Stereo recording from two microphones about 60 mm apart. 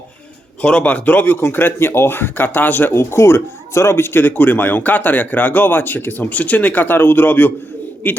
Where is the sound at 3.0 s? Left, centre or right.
Left.